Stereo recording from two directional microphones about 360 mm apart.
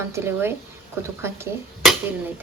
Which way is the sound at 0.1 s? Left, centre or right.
Centre.